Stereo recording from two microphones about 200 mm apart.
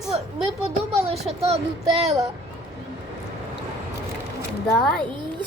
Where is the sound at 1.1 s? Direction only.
30° right (ahead or behind).